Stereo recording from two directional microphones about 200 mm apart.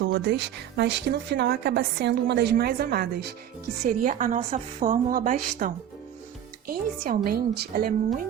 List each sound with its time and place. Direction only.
0.0 s a woman's voice: 60° right (ahead or behind)